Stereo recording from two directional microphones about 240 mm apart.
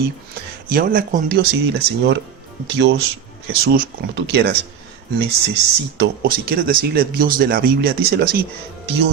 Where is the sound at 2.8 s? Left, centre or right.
Right.